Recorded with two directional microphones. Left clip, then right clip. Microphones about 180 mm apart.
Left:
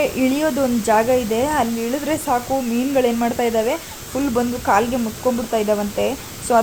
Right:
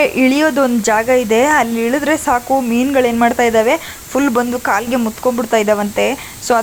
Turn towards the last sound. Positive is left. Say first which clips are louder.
# right 4 dB
turn(degrees=-20)  # may be behind; listen again after turning